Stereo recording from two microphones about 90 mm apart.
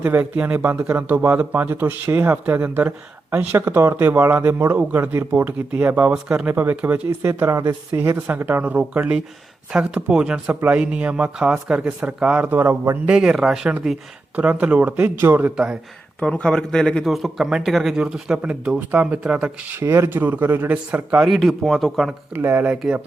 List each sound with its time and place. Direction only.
0.0 s speech: 20° right (ahead or behind)
16.2 s speech: 10° left (ahead or behind); by 21.2 s 15° right (ahead or behind)
21.2 s speech: centre (ahead or behind)
22.3 s speech: 25° right (ahead or behind)